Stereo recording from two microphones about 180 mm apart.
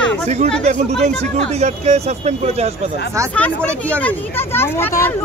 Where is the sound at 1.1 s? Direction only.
5° left (ahead or behind).